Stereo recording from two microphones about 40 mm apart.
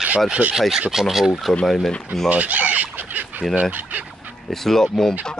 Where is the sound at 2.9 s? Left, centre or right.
Right.